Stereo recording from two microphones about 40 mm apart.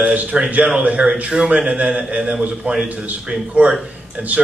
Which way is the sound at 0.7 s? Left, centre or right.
Right.